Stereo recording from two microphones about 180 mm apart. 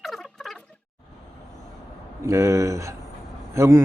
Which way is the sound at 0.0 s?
Centre (ahead or behind).